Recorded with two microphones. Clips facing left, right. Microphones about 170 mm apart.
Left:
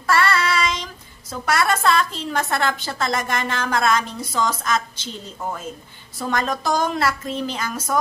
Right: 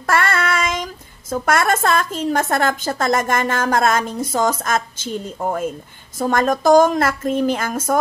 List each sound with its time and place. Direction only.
0.0 s child singing: 50° right (ahead or behind)
1.3 s a woman's voice: 50° right (ahead or behind)